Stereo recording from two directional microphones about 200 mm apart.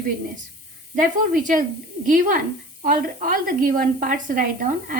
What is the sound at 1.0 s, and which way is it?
A woman's voice, 40° right (ahead or behind).